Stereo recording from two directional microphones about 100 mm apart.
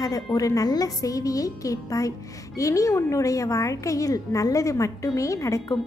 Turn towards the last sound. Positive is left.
turn(degrees=30)  # may be behind; listen again after turning